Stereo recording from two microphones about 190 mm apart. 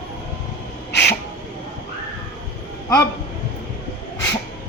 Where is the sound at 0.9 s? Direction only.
65° left (ahead or behind).